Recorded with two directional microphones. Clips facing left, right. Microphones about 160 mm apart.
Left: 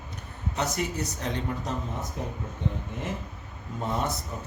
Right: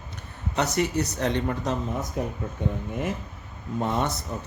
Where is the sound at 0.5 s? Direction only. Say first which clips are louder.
Right 5 dB; 75° right (ahead or behind).